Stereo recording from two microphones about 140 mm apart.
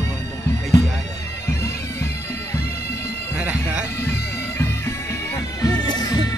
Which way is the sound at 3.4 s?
10° right (ahead or behind).